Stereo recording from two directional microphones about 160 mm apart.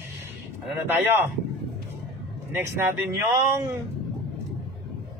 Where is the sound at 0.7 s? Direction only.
15° right (ahead or behind).